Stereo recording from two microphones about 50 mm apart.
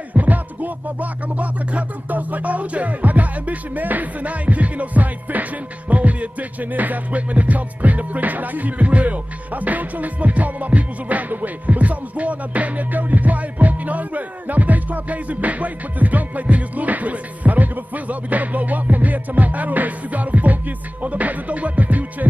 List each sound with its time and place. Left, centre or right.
0.1 s music: right